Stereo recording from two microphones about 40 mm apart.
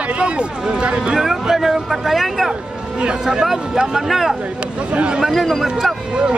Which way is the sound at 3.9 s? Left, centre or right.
Centre.